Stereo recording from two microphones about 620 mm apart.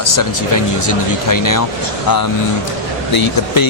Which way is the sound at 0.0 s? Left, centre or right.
Left.